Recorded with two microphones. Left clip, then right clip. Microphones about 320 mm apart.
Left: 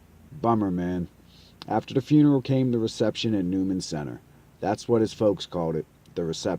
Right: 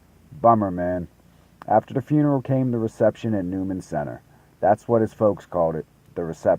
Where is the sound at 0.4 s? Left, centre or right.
Centre.